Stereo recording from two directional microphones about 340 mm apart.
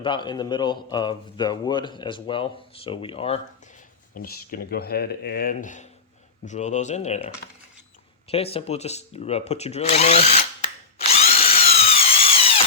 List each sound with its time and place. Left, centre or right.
0.0 s a man's voice: centre
8.3 s a man's voice: centre
10.9 s drill: centre